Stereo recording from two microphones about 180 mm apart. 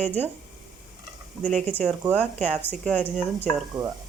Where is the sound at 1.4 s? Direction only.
5° left (ahead or behind).